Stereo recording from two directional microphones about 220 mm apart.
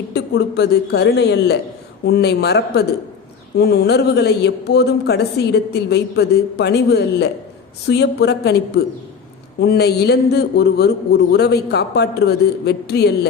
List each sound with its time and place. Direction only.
0.1 s speech: 50° left (ahead or behind)